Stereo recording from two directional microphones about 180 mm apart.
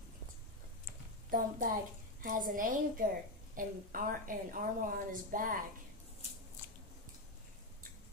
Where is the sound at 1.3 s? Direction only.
50° right (ahead or behind).